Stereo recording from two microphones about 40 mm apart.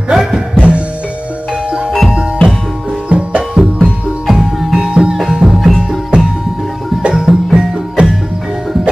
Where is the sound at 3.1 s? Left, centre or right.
Right.